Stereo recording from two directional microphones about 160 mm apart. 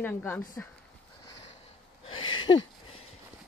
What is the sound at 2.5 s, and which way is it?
Speech, 35° left (ahead or behind).